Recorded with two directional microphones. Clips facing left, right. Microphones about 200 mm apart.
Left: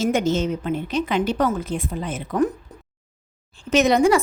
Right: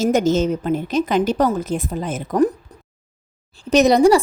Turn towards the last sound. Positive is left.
turn(degrees=-35)  # may be behind; listen again after turning